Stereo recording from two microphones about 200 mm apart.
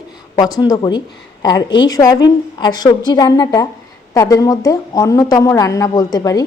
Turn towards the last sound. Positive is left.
turn(degrees=20)  # may be behind; listen again after turning